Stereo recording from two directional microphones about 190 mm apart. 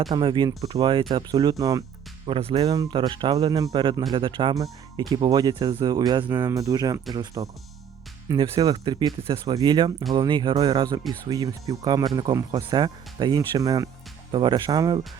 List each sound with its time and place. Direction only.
0.1 s speech: 25° right (ahead or behind)